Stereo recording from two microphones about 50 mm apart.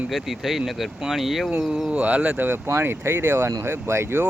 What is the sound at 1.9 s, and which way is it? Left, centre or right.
Speech, right.